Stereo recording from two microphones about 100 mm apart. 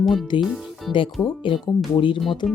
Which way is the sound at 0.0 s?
Centre (ahead or behind).